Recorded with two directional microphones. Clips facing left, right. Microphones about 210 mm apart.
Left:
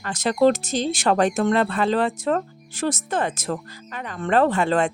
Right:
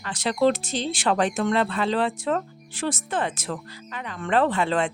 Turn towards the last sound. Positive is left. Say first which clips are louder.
# left 3 dB
turn(degrees=45)  # may be behind; listen again after turning